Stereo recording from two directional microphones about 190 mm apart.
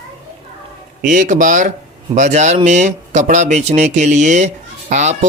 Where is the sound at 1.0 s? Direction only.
40° right (ahead or behind).